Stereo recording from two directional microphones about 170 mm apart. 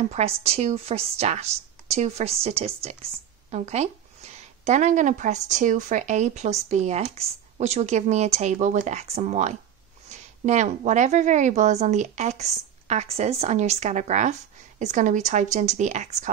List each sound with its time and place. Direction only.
0.1 s a woman's voice: 40° right (ahead or behind)